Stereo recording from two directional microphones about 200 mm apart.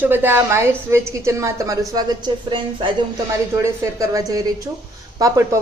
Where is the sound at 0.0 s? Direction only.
10° right (ahead or behind).